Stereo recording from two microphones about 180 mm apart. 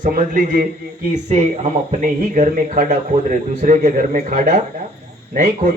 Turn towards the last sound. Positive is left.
turn(degrees=-40)  # may be behind; listen again after turning